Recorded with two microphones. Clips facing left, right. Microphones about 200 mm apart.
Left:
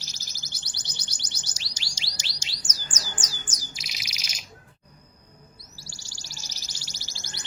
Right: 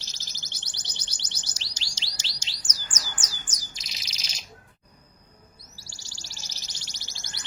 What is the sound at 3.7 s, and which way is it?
Bird, 10° left (ahead or behind).